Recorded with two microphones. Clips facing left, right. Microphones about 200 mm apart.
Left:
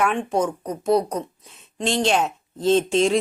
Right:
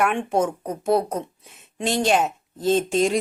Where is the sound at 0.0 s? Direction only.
5° right (ahead or behind).